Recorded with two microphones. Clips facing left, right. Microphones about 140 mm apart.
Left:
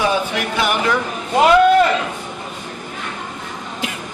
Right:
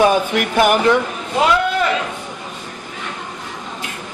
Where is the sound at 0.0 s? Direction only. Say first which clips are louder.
Right 4 dB; 50° right (ahead or behind).